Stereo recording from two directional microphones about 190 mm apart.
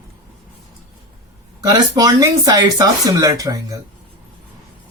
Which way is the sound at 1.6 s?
20° right (ahead or behind).